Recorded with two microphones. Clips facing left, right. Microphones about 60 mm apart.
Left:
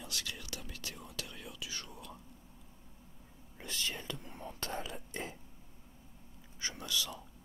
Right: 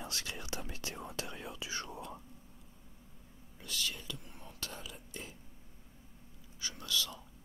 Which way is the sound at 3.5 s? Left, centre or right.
Left.